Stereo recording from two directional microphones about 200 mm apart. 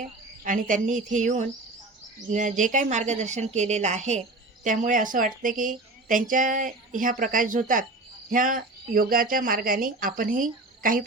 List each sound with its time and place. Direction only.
0.4 s a woman's voice: 40° right (ahead or behind)